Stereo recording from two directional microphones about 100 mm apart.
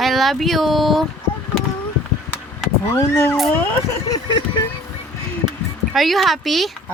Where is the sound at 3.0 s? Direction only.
30° left (ahead or behind).